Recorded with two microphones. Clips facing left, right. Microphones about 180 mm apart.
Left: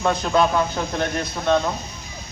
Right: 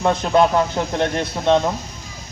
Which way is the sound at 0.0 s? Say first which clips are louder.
Right 3 dB; 20° right (ahead or behind).